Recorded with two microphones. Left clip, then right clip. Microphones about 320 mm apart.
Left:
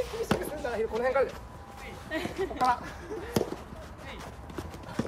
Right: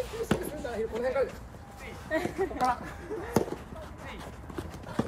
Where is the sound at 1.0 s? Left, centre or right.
Centre.